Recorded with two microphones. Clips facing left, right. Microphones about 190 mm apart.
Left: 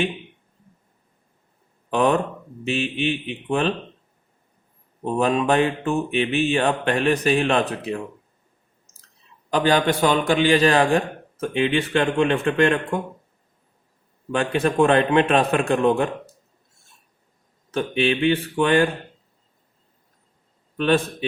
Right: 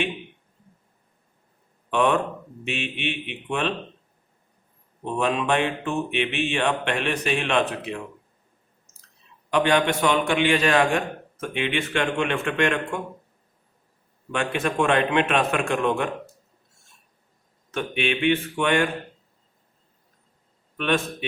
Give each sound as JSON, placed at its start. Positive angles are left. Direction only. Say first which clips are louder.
{"t": 1.9, "sound": "a man's voice", "louder": "left 2 dB", "side_deg": 35}
{"t": 5.1, "sound": "a man's voice", "louder": "left 4 dB", "side_deg": 40}
{"t": 9.5, "sound": "a man's voice", "louder": "left 2 dB", "side_deg": 35}
{"t": 14.3, "sound": "a man's voice", "louder": "left 4 dB", "side_deg": 35}
{"t": 17.7, "sound": "a man's voice", "louder": "left 4 dB", "side_deg": 35}
{"t": 20.7, "sound": "a man's voice", "louder": "left 4 dB", "side_deg": 35}